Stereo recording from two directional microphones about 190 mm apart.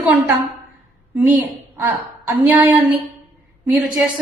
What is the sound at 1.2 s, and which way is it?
A woman's voice, 10° right (ahead or behind).